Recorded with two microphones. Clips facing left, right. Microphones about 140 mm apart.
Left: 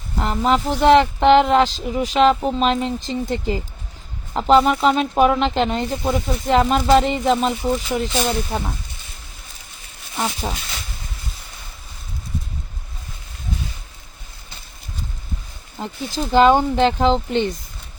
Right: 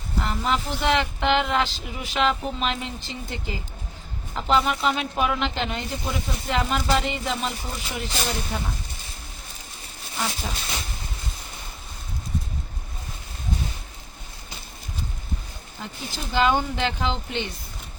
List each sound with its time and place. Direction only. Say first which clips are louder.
0.2 s speech: left 7 dB; 40° left (ahead or behind)
10.2 s speech: left 5 dB; 40° left (ahead or behind)
15.8 s speech: left 9 dB; 40° left (ahead or behind)